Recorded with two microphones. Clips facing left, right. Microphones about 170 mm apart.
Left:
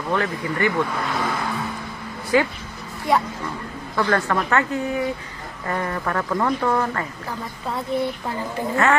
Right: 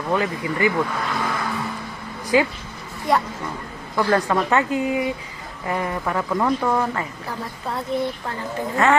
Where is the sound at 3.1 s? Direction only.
Centre (ahead or behind).